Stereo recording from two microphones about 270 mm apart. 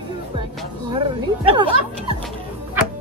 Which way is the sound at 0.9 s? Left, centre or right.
Centre.